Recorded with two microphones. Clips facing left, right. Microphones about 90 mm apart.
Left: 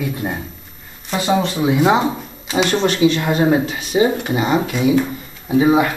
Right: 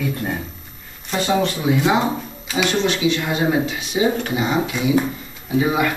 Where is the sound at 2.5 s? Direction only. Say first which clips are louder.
Left 3 dB; 40° left (ahead or behind).